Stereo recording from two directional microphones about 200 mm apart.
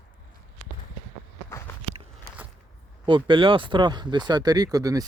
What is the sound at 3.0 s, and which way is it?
Speech, 25° right (ahead or behind).